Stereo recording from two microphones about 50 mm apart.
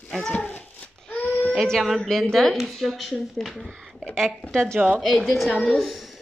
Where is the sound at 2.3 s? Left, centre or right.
Centre.